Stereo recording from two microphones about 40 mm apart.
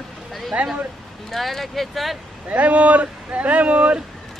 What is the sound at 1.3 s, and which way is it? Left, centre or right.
Speech, centre.